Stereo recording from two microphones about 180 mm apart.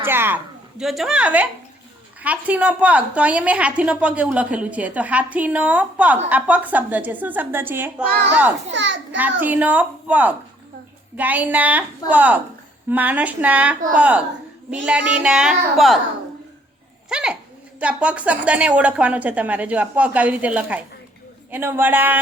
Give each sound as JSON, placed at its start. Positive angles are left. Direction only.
{"t": 0.0, "sound": "a woman's voice", "side_deg": -10}
{"t": 8.7, "sound": "a child's voice", "side_deg": -80}
{"t": 9.1, "sound": "a woman's voice", "side_deg": -10}
{"t": 17.1, "sound": "a child's voice", "side_deg": -5}